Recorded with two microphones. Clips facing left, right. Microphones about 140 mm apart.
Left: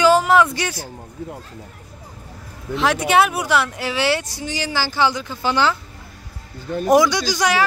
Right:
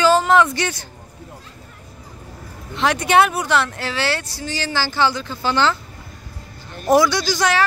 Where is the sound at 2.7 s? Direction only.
5° left (ahead or behind).